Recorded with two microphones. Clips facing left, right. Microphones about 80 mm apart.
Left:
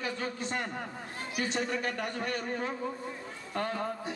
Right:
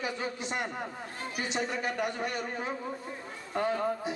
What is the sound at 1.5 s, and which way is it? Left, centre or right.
A man's voice, centre.